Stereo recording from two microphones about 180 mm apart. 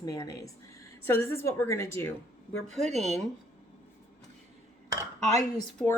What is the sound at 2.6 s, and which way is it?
Speech, 40° right (ahead or behind).